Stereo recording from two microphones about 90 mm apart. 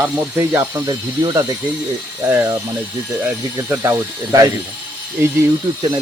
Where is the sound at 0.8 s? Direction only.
45° right (ahead or behind).